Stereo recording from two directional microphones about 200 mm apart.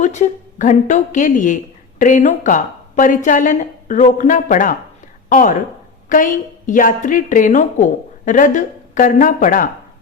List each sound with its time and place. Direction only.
0.0 s a woman's voice: 35° left (ahead or behind)